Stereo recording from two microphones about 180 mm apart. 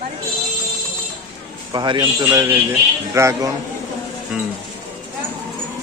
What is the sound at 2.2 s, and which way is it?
A man's voice, 10° right (ahead or behind).